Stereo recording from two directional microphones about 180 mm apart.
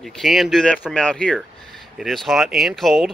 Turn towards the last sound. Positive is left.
turn(degrees=0)  # may be behind; listen again after turning